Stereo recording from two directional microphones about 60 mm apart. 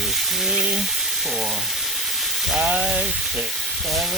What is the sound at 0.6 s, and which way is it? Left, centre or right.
Sizzle, centre.